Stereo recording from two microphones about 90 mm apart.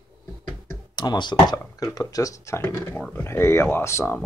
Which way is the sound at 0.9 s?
55° left (ahead or behind).